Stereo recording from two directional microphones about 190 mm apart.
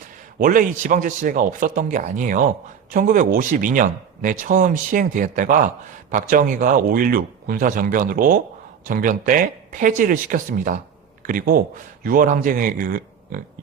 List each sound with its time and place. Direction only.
0.3 s speech: 50° right (ahead or behind)